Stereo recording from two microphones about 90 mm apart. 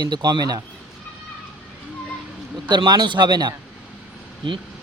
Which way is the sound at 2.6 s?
55° right (ahead or behind).